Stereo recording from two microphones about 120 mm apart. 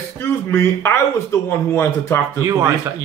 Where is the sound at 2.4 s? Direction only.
25° right (ahead or behind).